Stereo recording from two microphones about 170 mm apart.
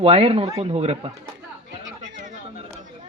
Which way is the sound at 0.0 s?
35° right (ahead or behind).